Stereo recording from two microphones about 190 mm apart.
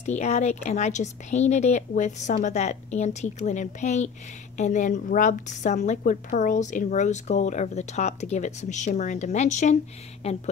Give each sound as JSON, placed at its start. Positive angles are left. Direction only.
{"t": 0.0, "sound": "a woman's voice", "side_deg": 35}